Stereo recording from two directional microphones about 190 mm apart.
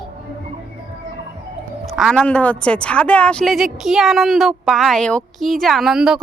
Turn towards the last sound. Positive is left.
turn(degrees=-5)  # may be behind; listen again after turning